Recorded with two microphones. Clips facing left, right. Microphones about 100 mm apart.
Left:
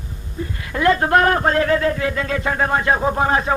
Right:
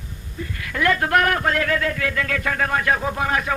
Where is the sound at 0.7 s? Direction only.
25° left (ahead or behind).